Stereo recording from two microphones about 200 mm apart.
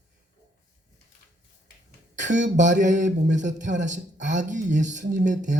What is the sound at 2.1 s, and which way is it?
Speech, 40° right (ahead or behind).